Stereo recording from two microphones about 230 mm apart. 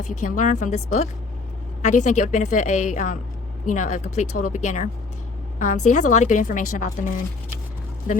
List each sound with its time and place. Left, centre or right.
0.0 s a woman's voice: left